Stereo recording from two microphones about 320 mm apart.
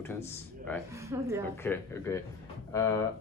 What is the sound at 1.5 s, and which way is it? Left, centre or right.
Speech, centre.